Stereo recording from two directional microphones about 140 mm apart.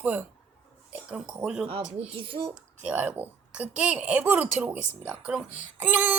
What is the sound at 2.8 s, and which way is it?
A woman's voice, 10° right (ahead or behind).